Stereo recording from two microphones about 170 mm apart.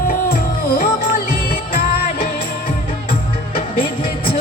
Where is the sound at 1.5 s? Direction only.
60° left (ahead or behind).